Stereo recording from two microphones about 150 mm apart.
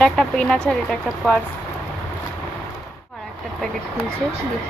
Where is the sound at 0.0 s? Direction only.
5° left (ahead or behind).